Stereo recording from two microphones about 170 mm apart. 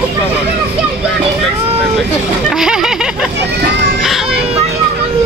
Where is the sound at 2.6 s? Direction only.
5° right (ahead or behind).